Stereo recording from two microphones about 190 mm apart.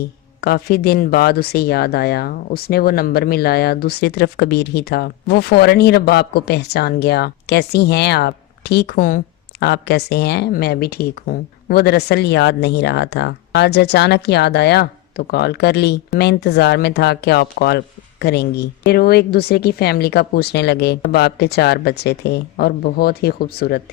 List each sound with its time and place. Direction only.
0.0 s speech: 55° left (ahead or behind)